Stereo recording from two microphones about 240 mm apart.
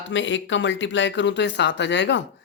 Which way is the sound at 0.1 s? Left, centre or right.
Left.